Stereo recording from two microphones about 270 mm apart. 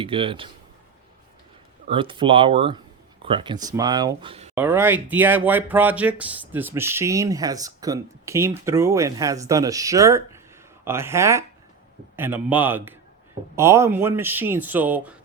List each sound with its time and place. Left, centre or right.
0.0 s speech: centre
1.9 s speech: centre
4.5 s speech: centre